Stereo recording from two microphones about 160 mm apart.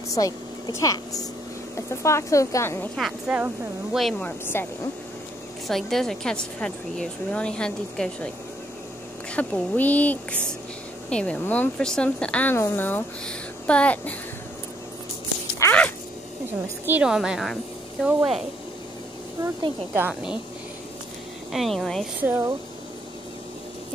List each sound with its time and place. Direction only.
0.1 s speech: 20° left (ahead or behind)
3.0 s speech: 5° right (ahead or behind)
4.0 s speech: 10° left (ahead or behind)
5.7 s speech: centre (ahead or behind)
9.3 s speech: 10° left (ahead or behind)
15.6 s a sound: 10° left (ahead or behind)
16.8 s speech: 10° right (ahead or behind)
19.9 s a woman's voice: 10° right (ahead or behind)
21.5 s speech: centre (ahead or behind)
22.2 s a woman's voice: 15° right (ahead or behind)